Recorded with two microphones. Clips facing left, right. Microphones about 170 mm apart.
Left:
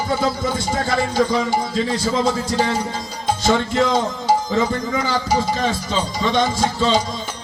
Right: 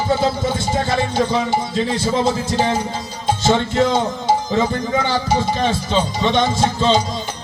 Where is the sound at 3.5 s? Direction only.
30° right (ahead or behind).